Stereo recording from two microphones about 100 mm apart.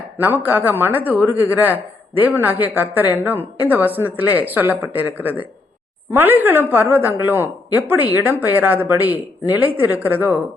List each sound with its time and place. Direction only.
0.2 s a man's voice: 20° right (ahead or behind)